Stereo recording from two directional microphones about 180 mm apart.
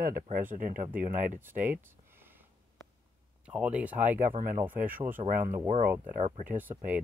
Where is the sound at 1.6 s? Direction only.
10° right (ahead or behind).